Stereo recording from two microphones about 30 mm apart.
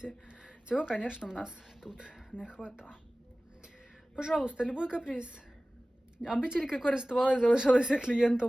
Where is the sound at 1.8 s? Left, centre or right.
Left.